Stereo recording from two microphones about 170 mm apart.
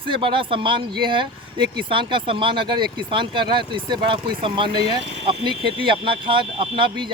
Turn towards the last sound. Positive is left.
turn(degrees=-30)  # may be behind; listen again after turning